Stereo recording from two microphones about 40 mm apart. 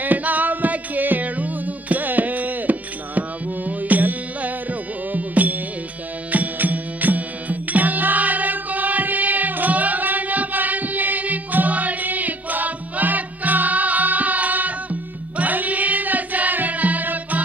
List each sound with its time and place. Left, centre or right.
0.0 s music: right